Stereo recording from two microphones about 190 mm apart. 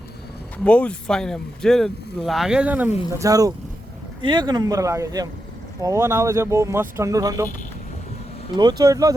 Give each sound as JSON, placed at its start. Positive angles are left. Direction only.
{"t": 0.6, "sound": "speech", "side_deg": 5}
{"t": 8.5, "sound": "speech", "side_deg": -20}